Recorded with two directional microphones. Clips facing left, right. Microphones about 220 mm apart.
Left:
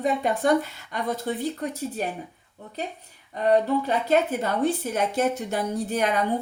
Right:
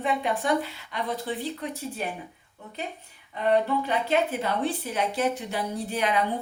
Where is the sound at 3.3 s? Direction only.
40° left (ahead or behind).